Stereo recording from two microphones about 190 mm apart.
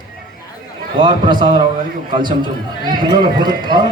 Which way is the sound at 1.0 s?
25° right (ahead or behind).